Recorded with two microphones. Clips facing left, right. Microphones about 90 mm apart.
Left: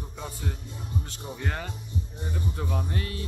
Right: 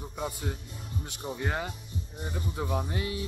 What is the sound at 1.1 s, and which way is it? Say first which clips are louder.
Speech: right 1 dB; 15° right (ahead or behind).